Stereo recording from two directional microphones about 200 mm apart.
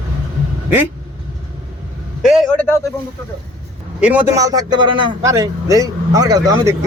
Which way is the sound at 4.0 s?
5° right (ahead or behind).